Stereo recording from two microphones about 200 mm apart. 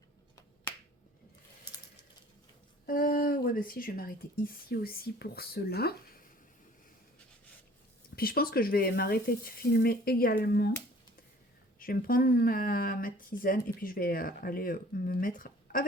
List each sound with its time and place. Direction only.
2.8 s speech: 45° left (ahead or behind)
8.1 s speech: 50° left (ahead or behind)
11.8 s speech: 45° left (ahead or behind)